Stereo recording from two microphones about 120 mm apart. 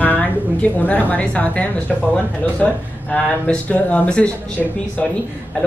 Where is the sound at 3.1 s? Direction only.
10° left (ahead or behind).